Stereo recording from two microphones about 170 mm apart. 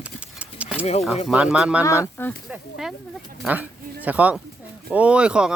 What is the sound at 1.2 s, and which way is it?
Speech, 5° right (ahead or behind).